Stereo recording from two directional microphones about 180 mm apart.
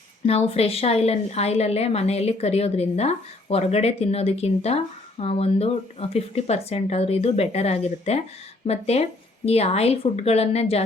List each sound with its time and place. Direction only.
0.3 s a woman's voice: 35° left (ahead or behind)